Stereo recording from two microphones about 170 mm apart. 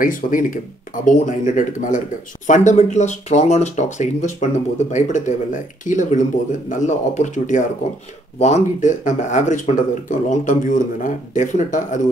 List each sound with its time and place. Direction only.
0.0 s speech: 50° left (ahead or behind)